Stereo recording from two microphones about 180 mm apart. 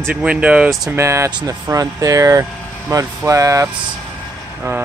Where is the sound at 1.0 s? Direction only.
15° right (ahead or behind).